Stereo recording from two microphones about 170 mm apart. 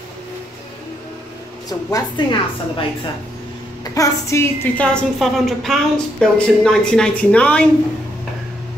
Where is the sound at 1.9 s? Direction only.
25° left (ahead or behind).